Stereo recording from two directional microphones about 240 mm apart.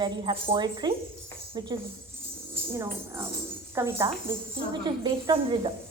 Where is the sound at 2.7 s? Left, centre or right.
Centre.